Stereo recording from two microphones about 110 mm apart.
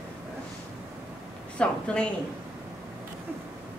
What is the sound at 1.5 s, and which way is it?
Speech, 10° left (ahead or behind).